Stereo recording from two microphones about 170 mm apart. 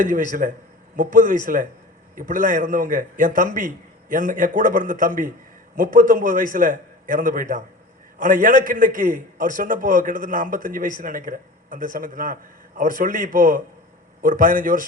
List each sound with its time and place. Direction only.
0.0 s a man's voice: 50° right (ahead or behind)